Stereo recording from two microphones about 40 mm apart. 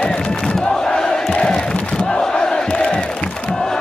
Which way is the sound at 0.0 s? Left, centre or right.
Left.